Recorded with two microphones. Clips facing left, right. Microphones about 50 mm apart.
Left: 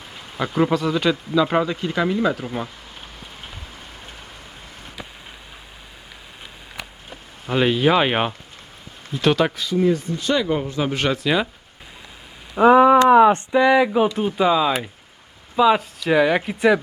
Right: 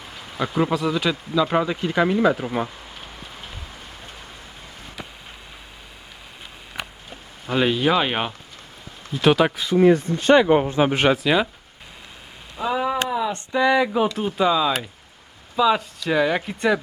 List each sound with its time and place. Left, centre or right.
0.3 s speech: centre
1.6 s speech: centre
7.4 s speech: centre
9.1 s speech: centre
9.8 s speech: right
11.2 s speech: centre
12.5 s speech: left
13.5 s speech: centre
15.8 s speech: centre
16.1 s speech: centre